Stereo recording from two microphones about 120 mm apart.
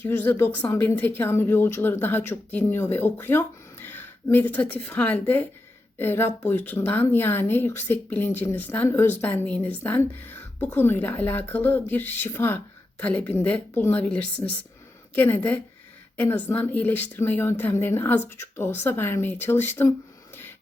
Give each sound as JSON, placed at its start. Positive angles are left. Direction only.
{"t": 0.0, "sound": "a woman's voice", "side_deg": 15}